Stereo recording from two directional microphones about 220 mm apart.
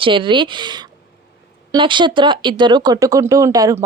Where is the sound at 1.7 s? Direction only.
20° right (ahead or behind).